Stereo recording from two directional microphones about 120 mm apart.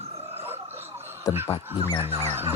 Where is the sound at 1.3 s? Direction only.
30° left (ahead or behind).